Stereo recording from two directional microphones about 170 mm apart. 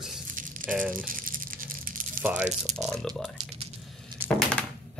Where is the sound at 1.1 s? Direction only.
55° right (ahead or behind).